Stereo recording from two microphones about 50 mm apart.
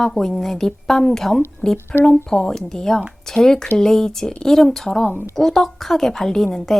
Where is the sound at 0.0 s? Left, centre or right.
Centre.